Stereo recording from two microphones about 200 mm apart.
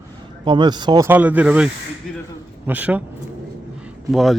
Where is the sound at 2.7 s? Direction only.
10° right (ahead or behind).